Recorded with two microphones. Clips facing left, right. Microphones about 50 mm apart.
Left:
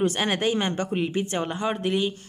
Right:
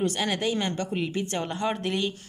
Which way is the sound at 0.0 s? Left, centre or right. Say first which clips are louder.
Left 3 dB; left.